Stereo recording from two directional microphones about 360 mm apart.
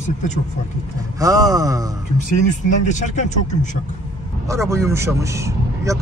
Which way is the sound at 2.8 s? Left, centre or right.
Centre.